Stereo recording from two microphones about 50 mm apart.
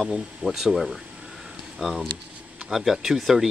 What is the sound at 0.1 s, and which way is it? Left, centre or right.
Speech, centre.